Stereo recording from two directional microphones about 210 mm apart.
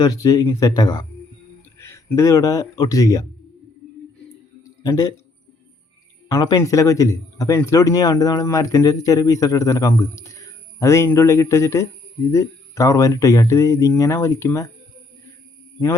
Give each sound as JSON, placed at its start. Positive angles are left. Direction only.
{"t": 0.0, "sound": "a man's voice", "side_deg": 15}
{"t": 4.8, "sound": "speech", "side_deg": 15}
{"t": 6.2, "sound": "a man's voice", "side_deg": 15}